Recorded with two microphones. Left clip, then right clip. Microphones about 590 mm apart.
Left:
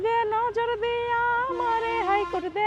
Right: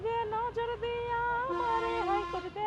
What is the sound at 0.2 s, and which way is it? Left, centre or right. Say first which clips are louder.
Music: left 8 dB; left.